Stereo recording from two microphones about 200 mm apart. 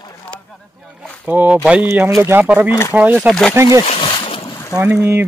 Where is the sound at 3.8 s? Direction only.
30° left (ahead or behind).